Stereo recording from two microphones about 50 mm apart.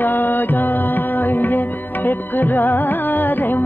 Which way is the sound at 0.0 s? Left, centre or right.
Left.